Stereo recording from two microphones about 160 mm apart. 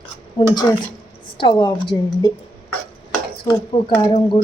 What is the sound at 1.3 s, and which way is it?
Speech, 30° left (ahead or behind).